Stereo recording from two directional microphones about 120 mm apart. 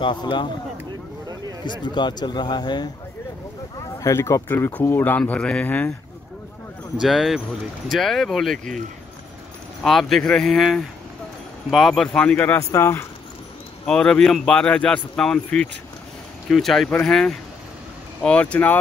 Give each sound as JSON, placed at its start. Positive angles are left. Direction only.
{"t": 0.0, "sound": "a man's voice", "side_deg": 40}
{"t": 1.6, "sound": "a man's voice", "side_deg": 40}
{"t": 4.0, "sound": "speech", "side_deg": 25}
{"t": 7.0, "sound": "speech", "side_deg": 0}
{"t": 9.8, "sound": "speech", "side_deg": 0}
{"t": 13.8, "sound": "speech", "side_deg": 5}